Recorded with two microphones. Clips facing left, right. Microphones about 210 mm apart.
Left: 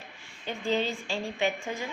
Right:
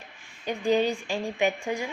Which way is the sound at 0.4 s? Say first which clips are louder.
Right 5 dB; 15° right (ahead or behind).